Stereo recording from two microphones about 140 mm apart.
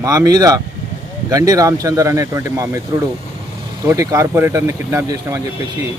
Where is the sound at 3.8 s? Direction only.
20° right (ahead or behind).